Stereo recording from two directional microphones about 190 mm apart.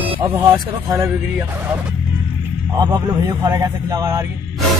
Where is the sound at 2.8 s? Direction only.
20° right (ahead or behind).